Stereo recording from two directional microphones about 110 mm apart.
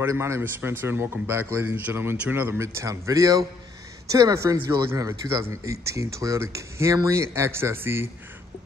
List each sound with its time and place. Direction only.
0.0 s speech: 25° right (ahead or behind)